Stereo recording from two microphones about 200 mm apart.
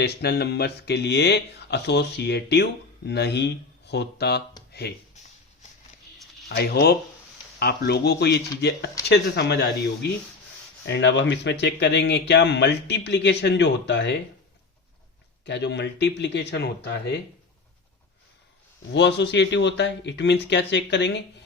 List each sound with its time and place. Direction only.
0.0 s speech: 55° left (ahead or behind)
6.5 s speech: 55° left (ahead or behind)
15.4 s speech: 60° left (ahead or behind)
18.9 s speech: 60° left (ahead or behind)